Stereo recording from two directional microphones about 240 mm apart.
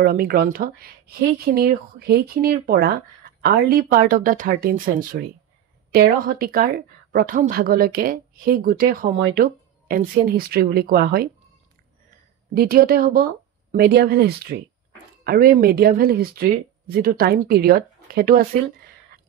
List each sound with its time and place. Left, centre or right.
0.0 s speech: right
12.5 s speech: right